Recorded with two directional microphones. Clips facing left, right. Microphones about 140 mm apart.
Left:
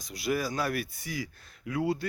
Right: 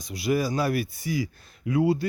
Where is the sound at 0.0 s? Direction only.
5° right (ahead or behind).